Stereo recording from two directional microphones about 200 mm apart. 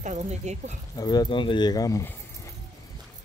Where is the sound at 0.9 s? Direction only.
20° left (ahead or behind).